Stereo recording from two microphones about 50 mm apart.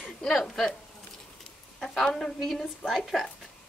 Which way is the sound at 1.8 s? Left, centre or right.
Centre.